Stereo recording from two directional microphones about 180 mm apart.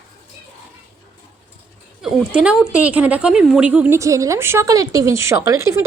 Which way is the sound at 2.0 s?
5° right (ahead or behind).